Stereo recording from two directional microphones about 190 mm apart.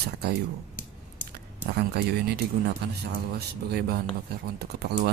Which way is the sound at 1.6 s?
50° right (ahead or behind).